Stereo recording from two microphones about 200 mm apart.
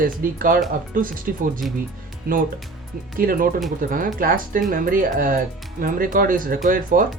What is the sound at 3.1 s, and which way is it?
Speech, 45° right (ahead or behind).